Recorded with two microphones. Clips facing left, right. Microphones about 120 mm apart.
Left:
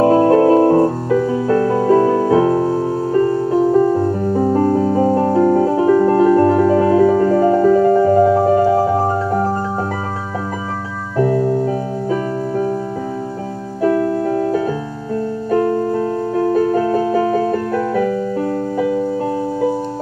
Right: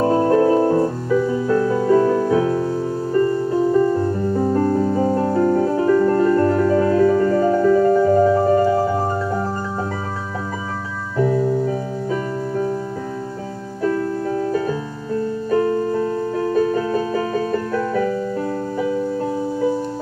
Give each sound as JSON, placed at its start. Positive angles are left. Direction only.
{"t": 0.0, "sound": "music", "side_deg": 70}
{"t": 11.1, "sound": "music", "side_deg": 65}
{"t": 13.8, "sound": "music", "side_deg": 65}
{"t": 16.3, "sound": "music", "side_deg": 50}